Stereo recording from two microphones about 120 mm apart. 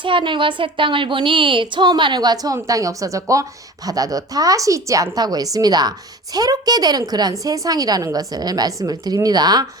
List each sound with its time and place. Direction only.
0.0 s a woman's voice: 45° right (ahead or behind)